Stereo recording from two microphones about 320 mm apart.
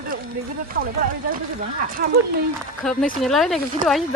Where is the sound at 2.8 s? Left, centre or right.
Centre.